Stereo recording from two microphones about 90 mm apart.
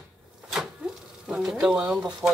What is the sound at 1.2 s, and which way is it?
Speech, 10° right (ahead or behind).